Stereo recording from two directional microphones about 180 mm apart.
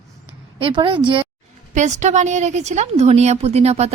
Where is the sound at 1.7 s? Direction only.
40° right (ahead or behind).